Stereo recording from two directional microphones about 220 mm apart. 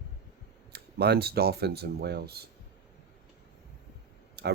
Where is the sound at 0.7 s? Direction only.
45° right (ahead or behind).